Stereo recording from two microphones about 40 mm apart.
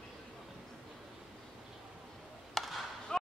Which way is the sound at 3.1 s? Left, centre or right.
Centre.